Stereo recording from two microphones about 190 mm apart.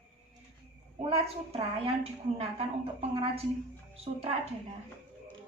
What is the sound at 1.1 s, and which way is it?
A woman's voice, 30° right (ahead or behind).